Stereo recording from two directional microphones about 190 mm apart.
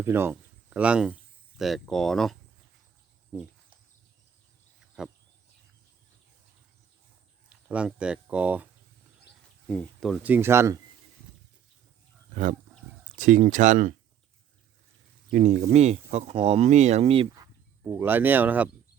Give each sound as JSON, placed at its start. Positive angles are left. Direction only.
{"t": 0.0, "sound": "speech", "side_deg": -10}
{"t": 3.3, "sound": "speech", "side_deg": -5}
{"t": 5.0, "sound": "a sound", "side_deg": -5}
{"t": 7.5, "sound": "speech", "side_deg": -5}
{"t": 9.6, "sound": "speech", "side_deg": 5}
{"t": 12.3, "sound": "wild animals", "side_deg": -40}
{"t": 13.1, "sound": "speech", "side_deg": -40}
{"t": 15.3, "sound": "speech", "side_deg": -40}
{"t": 17.3, "sound": "speech", "side_deg": -15}